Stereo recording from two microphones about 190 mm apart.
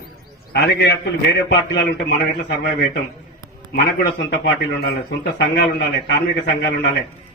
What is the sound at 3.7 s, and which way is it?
A man's voice, 55° left (ahead or behind).